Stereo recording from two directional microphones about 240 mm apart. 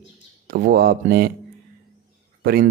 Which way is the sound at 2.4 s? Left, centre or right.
Right.